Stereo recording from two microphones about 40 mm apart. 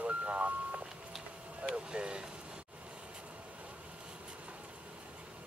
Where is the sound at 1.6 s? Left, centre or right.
Right.